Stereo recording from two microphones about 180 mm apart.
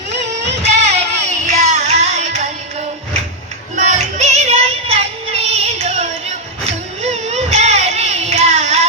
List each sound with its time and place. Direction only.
0.6 s music: 40° right (ahead or behind)
3.8 s music: 40° right (ahead or behind)
6.7 s a sound: 35° right (ahead or behind)